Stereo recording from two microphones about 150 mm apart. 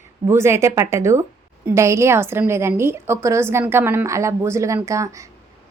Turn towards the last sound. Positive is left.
turn(degrees=-20)  # may be behind; listen again after turning